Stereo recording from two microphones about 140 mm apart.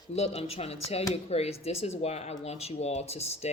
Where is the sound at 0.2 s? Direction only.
50° left (ahead or behind).